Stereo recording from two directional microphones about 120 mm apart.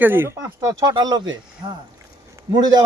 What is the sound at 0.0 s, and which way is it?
Speech, 20° right (ahead or behind).